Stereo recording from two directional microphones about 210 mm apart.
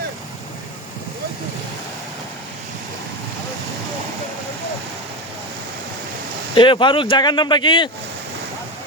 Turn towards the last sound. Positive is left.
turn(degrees=20)  # may be behind; listen again after turning